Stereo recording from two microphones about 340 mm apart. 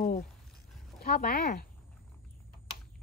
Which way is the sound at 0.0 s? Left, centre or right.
Left.